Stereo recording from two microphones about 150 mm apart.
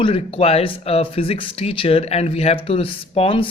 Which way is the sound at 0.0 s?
40° left (ahead or behind).